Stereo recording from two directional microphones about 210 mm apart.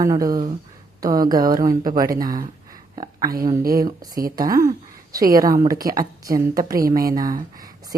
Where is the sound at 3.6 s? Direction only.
45° right (ahead or behind).